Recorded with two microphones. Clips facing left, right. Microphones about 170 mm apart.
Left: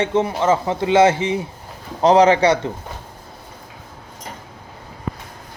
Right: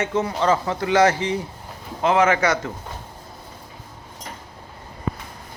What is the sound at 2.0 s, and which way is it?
Speech, 35° left (ahead or behind).